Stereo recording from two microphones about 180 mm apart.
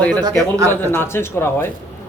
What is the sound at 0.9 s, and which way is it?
Speech, 10° left (ahead or behind).